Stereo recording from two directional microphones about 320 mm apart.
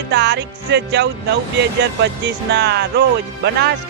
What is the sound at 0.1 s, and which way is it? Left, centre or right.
Music, right.